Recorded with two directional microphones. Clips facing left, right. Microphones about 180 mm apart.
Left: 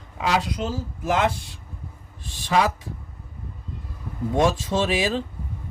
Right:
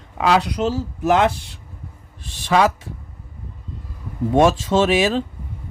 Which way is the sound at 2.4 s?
80° right.